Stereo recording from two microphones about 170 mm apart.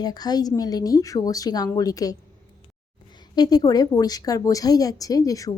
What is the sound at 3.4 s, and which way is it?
A woman's voice, 20° left (ahead or behind).